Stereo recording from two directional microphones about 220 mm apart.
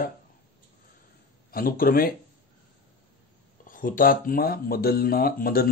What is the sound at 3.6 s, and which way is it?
Speech, 40° left (ahead or behind).